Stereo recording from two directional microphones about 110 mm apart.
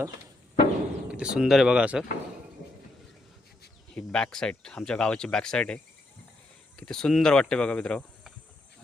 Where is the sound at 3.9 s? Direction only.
5° left (ahead or behind).